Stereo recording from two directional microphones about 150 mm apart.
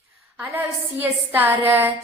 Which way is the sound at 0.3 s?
15° right (ahead or behind).